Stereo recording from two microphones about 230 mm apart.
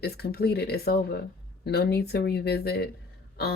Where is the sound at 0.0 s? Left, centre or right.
Left.